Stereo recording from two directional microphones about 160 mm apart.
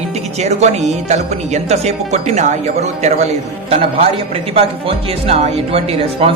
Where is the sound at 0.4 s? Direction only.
45° right (ahead or behind).